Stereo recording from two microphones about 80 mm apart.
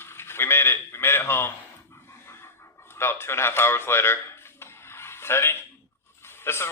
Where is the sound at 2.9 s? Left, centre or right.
Left.